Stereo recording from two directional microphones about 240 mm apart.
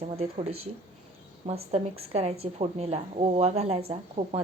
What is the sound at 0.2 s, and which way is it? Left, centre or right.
Speech, right.